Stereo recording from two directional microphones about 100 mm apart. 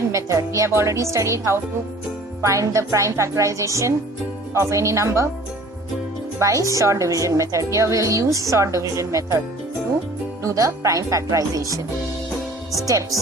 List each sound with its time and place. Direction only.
0.1 s a woman's voice: 30° right (ahead or behind)
6.4 s a woman's voice: 30° right (ahead or behind)
10.4 s a woman's voice: 35° right (ahead or behind)